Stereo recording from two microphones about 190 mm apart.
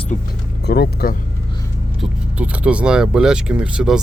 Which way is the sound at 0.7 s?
60° left (ahead or behind).